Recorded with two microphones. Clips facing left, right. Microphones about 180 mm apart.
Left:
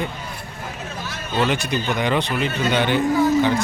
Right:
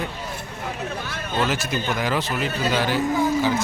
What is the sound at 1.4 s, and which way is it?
A man's voice, 5° right (ahead or behind).